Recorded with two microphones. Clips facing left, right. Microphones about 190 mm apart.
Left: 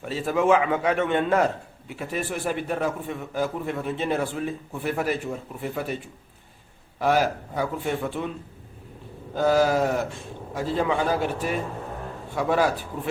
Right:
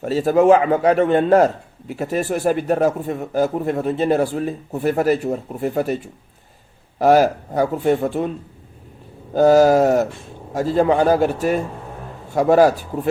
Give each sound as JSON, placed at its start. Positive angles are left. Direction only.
{"t": 0.0, "sound": "speech", "side_deg": -40}
{"t": 7.0, "sound": "speech", "side_deg": -40}
{"t": 9.3, "sound": "a man's voice", "side_deg": -40}